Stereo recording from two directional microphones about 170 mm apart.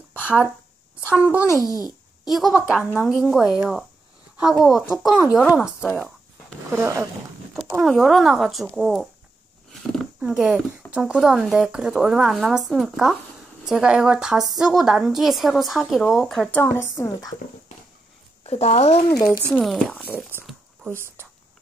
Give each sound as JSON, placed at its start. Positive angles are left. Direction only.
{"t": 0.2, "sound": "a sound", "side_deg": -5}
{"t": 1.0, "sound": "a woman's voice", "side_deg": -5}
{"t": 1.7, "sound": "a child's voice", "side_deg": 20}
{"t": 2.2, "sound": "speech", "side_deg": 0}
{"t": 6.7, "sound": "a woman's voice", "side_deg": -15}
{"t": 7.5, "sound": "speech", "side_deg": 0}
{"t": 9.9, "sound": "a sound", "side_deg": -5}
{"t": 10.9, "sound": "speech", "side_deg": -5}
{"t": 16.6, "sound": "speech", "side_deg": 15}
{"t": 18.4, "sound": "speech", "side_deg": 40}
{"t": 19.1, "sound": "a child's voice", "side_deg": 20}
{"t": 19.4, "sound": "speech", "side_deg": 0}